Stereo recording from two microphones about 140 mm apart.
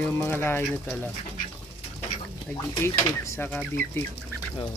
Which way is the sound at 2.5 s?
25° left (ahead or behind).